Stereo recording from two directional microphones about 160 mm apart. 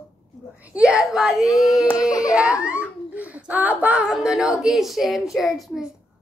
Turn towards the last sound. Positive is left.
turn(degrees=0)  # may be behind; listen again after turning